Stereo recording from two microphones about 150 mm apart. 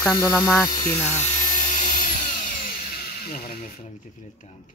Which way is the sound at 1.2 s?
55° left (ahead or behind).